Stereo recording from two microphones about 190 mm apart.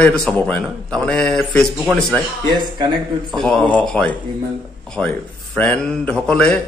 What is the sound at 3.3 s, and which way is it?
A man's voice, centre (ahead or behind).